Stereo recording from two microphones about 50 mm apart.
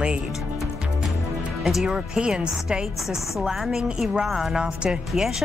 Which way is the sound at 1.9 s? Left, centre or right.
Centre.